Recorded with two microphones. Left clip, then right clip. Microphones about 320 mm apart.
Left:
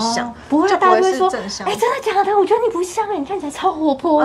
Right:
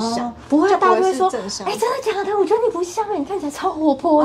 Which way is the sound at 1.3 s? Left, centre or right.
Left.